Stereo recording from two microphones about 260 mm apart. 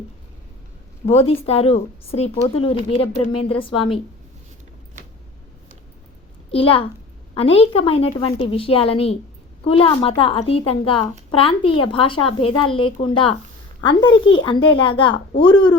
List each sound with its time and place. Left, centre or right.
1.0 s speech: left
6.5 s a child's voice: left
14.1 s a child's voice: left
14.4 s speech: centre